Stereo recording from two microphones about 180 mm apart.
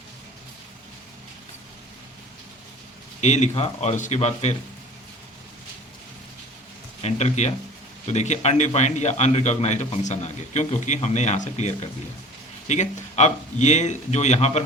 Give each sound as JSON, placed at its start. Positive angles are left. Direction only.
{"t": 3.2, "sound": "a man's voice", "side_deg": 40}
{"t": 7.0, "sound": "a man's voice", "side_deg": 40}